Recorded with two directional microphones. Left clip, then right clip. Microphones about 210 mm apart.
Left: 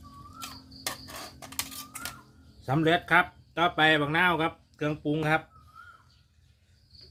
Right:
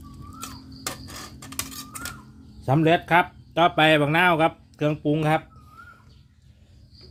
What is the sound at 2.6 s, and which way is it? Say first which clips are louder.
Speech: right 5 dB; 20° right (ahead or behind).